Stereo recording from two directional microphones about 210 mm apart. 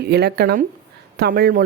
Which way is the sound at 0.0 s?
50° right (ahead or behind).